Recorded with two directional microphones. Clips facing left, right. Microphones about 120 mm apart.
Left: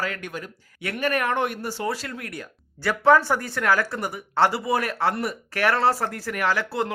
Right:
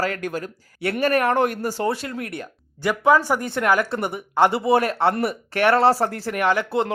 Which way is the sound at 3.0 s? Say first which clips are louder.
Even; 15° right (ahead or behind).